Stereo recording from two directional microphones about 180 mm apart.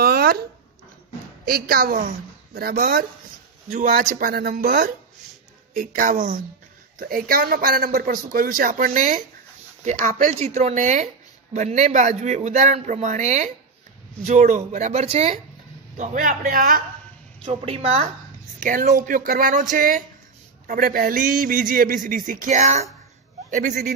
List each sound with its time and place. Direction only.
0.0 s a sound: 55° right (ahead or behind)
1.4 s a woman's voice: 55° right (ahead or behind); by 15.3 s 35° right (ahead or behind)
16.0 s a man's voice: 45° right (ahead or behind)
17.5 s speech: 35° right (ahead or behind)
18.6 s a man's voice: 45° right (ahead or behind)